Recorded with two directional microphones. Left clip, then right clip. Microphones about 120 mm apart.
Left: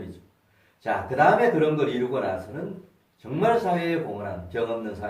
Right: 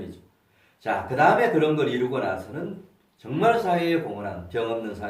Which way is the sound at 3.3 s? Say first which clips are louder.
Right 1 dB; 25° right (ahead or behind).